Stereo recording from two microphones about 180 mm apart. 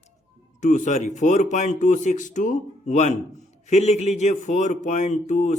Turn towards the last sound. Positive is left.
turn(degrees=40)  # may be behind; listen again after turning